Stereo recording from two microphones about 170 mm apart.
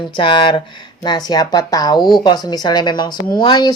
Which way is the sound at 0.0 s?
30° left (ahead or behind).